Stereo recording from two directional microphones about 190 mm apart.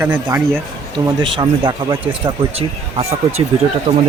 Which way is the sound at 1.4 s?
25° right (ahead or behind).